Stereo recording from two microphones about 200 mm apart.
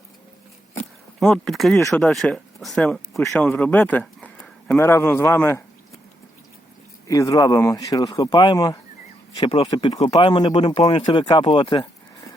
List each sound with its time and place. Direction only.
1.2 s speech: centre (ahead or behind)
7.1 s speech: 15° left (ahead or behind)